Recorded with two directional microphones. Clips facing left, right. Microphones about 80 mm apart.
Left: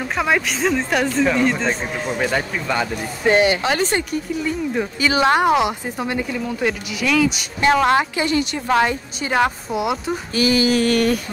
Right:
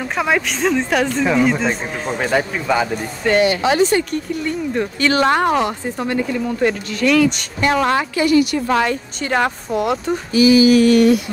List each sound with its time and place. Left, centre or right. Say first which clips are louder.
0.1 s speech: right 1 dB; centre
3.3 s a woman's voice: even; left
4.1 s speech: right 1 dB; centre
7.6 s a woman's voice: left 1 dB; left
8.6 s speech: even; centre
10.3 s mantra: right 7 dB; left